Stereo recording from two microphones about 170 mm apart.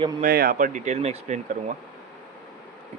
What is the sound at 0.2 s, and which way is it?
Speech, 60° right (ahead or behind).